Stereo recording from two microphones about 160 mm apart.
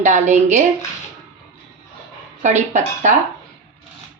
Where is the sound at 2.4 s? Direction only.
50° right (ahead or behind).